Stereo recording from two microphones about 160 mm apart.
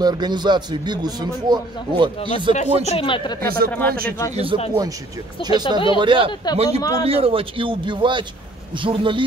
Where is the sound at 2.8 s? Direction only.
35° left (ahead or behind).